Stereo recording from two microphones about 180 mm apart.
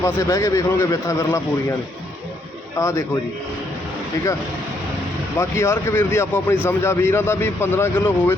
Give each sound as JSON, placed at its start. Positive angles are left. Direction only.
{"t": 0.0, "sound": "a man's voice", "side_deg": 15}
{"t": 5.4, "sound": "a man's voice", "side_deg": 15}